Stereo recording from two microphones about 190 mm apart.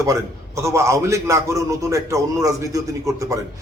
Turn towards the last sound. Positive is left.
turn(degrees=-15)  # may be behind; listen again after turning